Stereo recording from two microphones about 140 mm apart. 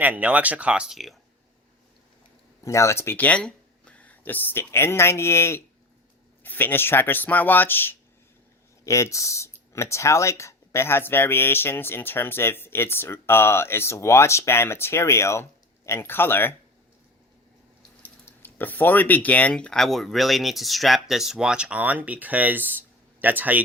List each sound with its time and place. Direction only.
0.0 s speech: 10° right (ahead or behind)
2.6 s speech: 20° left (ahead or behind)
18.0 s speech: 15° left (ahead or behind); by 23.6 s 10° right (ahead or behind)